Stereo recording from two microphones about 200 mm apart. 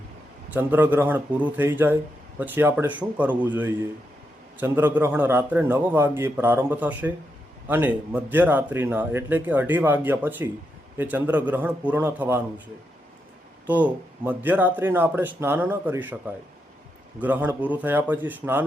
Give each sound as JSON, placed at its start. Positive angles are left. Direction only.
{"t": 0.5, "sound": "a man's voice", "side_deg": -10}
{"t": 13.7, "sound": "a man's voice", "side_deg": -10}